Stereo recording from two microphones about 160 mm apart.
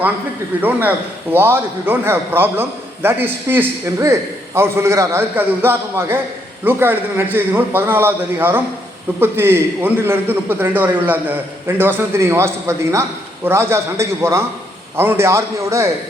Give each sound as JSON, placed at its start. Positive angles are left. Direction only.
{"t": 0.6, "sound": "a man's voice", "side_deg": -10}